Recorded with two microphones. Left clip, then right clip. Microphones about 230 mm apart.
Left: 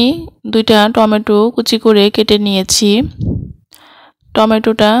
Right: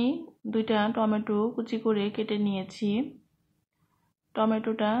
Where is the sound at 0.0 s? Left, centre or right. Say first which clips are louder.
Left 16 dB; left.